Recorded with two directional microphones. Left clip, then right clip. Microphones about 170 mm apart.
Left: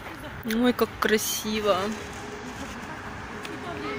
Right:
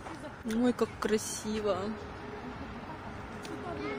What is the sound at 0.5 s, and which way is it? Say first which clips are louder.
Speech: left 6 dB; centre (ahead or behind).